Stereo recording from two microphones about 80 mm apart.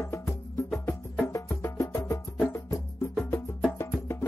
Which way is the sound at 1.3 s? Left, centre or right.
Left.